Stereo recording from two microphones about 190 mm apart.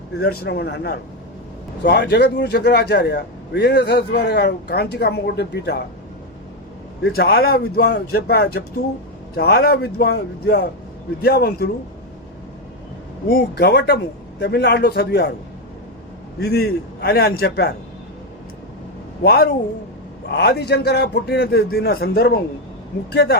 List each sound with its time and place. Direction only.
0.2 s a man's voice: 55° left (ahead or behind)
7.0 s a man's voice: 60° left (ahead or behind)
13.2 s a man's voice: 55° left (ahead or behind)
16.4 s a man's voice: 60° left (ahead or behind)
19.2 s a man's voice: 55° left (ahead or behind)